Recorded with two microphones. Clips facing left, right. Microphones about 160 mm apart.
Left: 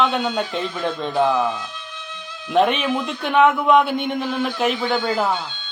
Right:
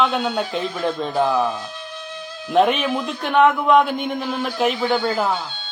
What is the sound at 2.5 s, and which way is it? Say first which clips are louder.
A man's voice: right 1 dB; centre (ahead or behind).